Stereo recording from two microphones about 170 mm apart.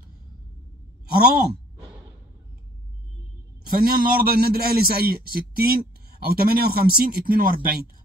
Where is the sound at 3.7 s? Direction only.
60° right (ahead or behind).